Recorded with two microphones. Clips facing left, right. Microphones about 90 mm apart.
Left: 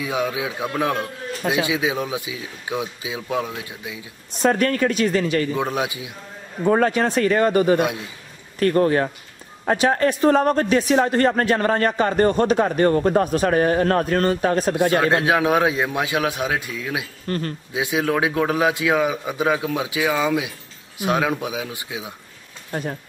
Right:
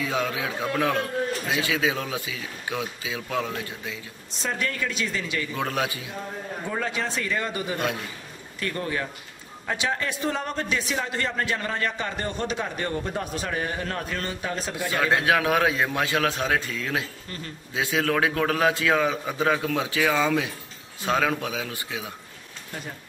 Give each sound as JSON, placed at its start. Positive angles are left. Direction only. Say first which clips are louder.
{"t": 0.0, "sound": "a man's voice", "louder": "left 3 dB", "side_deg": 15}
{"t": 4.3, "sound": "a man's voice", "louder": "left 11 dB", "side_deg": 55}
{"t": 5.6, "sound": "a man's voice", "louder": "left 4 dB", "side_deg": 20}
{"t": 6.6, "sound": "a man's voice", "louder": "left 12 dB", "side_deg": 55}
{"t": 14.8, "sound": "a man's voice", "louder": "left 3 dB", "side_deg": 20}
{"t": 17.3, "sound": "a man's voice", "louder": "left 12 dB", "side_deg": 60}
{"t": 17.7, "sound": "a man's voice", "louder": "left 3 dB", "side_deg": 15}
{"t": 22.7, "sound": "speech", "louder": "left 10 dB", "side_deg": 55}